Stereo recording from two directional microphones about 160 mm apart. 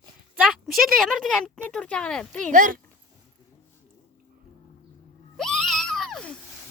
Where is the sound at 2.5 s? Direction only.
55° right (ahead or behind).